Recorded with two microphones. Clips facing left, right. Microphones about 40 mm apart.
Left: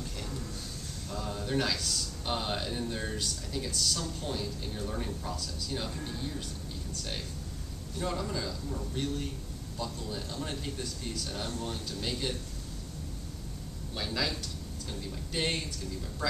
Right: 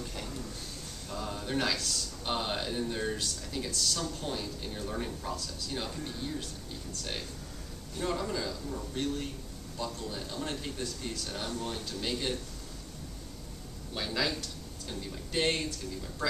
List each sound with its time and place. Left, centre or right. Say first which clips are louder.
1.1 s speech: left 1 dB; centre
8.0 s speech: right 1 dB; centre
11.5 s speech: right 1 dB; centre
11.9 s speech: right 2 dB; centre
13.9 s speech: right 1 dB; centre